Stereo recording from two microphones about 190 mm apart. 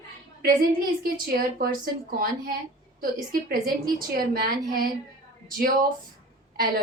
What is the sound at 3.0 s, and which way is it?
A woman's voice, 50° right (ahead or behind).